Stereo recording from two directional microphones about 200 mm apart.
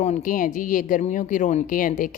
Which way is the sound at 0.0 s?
40° left (ahead or behind).